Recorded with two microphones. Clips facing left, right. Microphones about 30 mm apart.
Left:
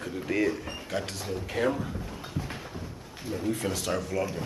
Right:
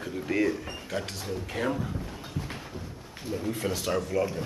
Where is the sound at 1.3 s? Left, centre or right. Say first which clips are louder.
Left 2 dB; centre.